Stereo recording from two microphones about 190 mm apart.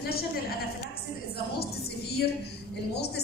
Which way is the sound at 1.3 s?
55° left (ahead or behind).